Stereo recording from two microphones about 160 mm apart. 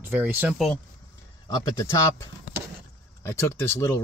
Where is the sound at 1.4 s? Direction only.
25° left (ahead or behind).